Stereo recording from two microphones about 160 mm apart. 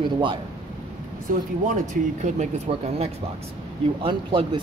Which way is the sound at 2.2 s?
45° right (ahead or behind).